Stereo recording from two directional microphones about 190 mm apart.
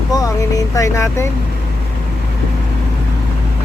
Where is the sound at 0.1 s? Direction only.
20° left (ahead or behind).